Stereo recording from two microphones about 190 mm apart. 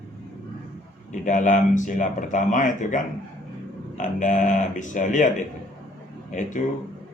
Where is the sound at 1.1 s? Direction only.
40° left (ahead or behind).